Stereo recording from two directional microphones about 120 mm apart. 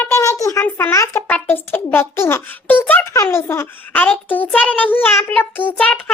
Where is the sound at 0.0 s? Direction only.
20° left (ahead or behind).